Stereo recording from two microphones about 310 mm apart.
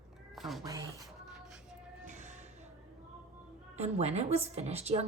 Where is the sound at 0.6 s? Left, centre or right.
Centre.